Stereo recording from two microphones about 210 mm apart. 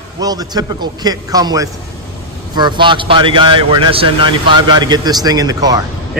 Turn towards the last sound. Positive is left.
turn(degrees=-15)  # may be behind; listen again after turning